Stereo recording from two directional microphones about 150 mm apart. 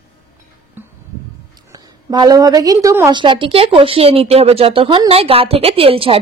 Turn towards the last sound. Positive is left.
turn(degrees=-40)  # may be behind; listen again after turning